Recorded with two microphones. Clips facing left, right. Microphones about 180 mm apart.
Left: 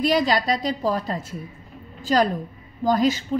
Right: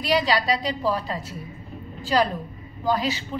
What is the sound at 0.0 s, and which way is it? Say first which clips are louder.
A woman's voice: left 2 dB; 50° left (ahead or behind).